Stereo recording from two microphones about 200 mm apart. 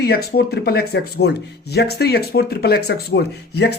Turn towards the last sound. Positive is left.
turn(degrees=55)  # may be behind; listen again after turning